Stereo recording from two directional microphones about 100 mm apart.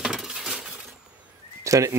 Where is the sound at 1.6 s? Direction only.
30° right (ahead or behind).